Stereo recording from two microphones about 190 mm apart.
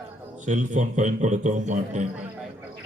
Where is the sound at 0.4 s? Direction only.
40° right (ahead or behind).